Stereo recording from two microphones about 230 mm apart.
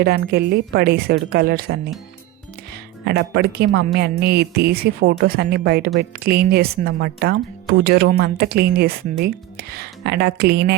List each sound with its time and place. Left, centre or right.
0.0 s speech: right
3.0 s speech: right